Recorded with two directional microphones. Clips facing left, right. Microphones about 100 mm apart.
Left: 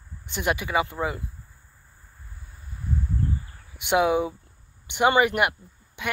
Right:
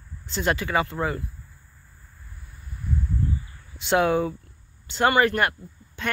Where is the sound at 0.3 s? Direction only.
15° left (ahead or behind).